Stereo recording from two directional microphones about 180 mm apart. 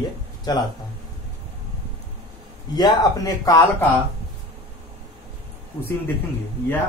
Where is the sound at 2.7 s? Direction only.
20° left (ahead or behind).